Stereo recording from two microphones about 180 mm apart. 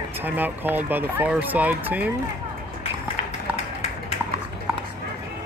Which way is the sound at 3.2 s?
40° left (ahead or behind).